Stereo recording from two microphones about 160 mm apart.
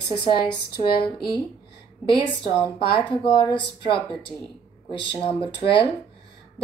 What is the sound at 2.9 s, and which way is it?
Speech, 30° left (ahead or behind).